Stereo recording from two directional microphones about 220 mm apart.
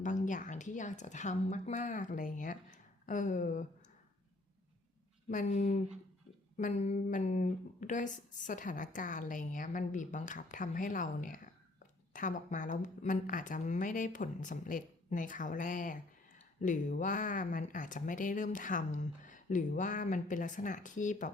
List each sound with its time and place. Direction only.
0.0 s speech: 35° left (ahead or behind)
5.3 s speech: 35° left (ahead or behind)